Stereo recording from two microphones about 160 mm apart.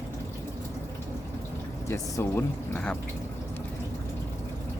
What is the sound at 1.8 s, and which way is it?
Speech, 15° left (ahead or behind).